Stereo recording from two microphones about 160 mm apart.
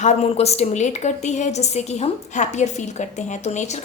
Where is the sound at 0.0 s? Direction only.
45° left (ahead or behind).